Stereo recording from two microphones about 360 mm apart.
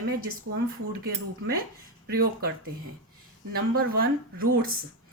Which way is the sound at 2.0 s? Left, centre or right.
Right.